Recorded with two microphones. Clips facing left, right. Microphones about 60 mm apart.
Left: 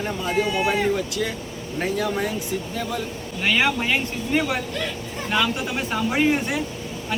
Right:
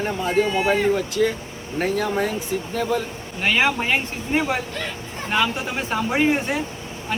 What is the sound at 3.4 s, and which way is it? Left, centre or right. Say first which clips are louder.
Speech: right 1 dB; centre.